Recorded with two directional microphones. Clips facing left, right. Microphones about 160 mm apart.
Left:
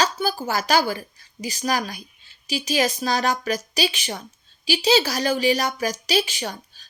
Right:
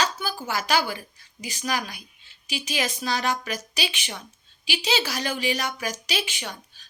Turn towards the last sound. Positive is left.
turn(degrees=35)  # may be behind; listen again after turning